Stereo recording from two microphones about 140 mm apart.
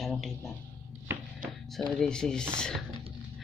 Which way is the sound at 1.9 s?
5° left (ahead or behind).